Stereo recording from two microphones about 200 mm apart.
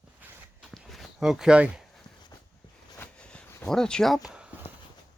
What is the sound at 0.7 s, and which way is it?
Walk, centre (ahead or behind).